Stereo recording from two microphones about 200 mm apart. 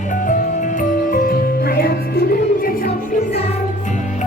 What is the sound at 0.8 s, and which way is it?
Music, 45° left (ahead or behind).